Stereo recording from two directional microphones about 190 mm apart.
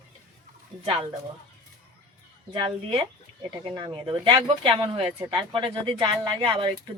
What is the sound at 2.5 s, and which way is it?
Speech, 25° right (ahead or behind).